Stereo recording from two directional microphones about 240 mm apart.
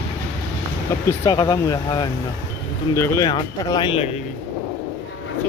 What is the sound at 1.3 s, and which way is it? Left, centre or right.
Speech, centre.